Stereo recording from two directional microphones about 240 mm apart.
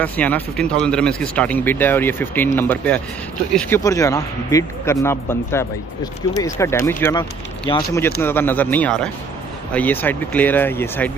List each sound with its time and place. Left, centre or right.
0.0 s speech: centre